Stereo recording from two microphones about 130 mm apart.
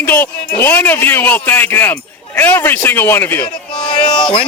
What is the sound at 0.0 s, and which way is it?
A man's voice, 15° left (ahead or behind).